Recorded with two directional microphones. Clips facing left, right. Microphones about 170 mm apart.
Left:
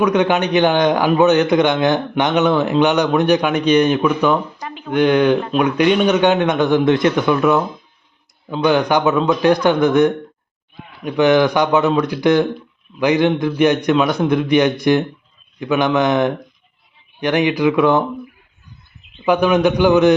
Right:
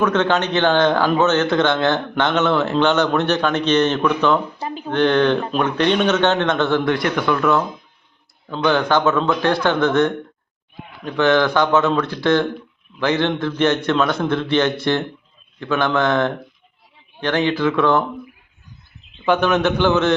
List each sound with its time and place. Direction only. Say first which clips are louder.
0.0 s a man's voice: left 2 dB; 15° left (ahead or behind)
4.6 s a sound: right 3 dB; 35° right (ahead or behind)
4.9 s a man's voice: left 3 dB; 10° left (ahead or behind)
19.2 s a man's voice: left 3 dB; 10° left (ahead or behind)